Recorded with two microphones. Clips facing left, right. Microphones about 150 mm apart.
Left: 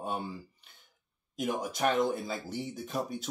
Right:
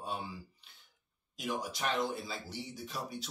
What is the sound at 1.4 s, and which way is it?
Speech, 50° left (ahead or behind).